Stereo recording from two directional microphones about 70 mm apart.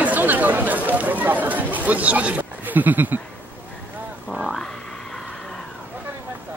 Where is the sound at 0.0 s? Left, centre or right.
Right.